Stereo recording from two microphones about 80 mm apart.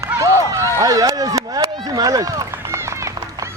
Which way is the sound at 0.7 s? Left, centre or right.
Right.